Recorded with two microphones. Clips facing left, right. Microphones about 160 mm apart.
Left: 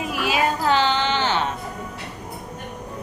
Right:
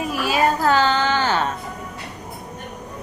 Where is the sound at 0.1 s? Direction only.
45° right (ahead or behind).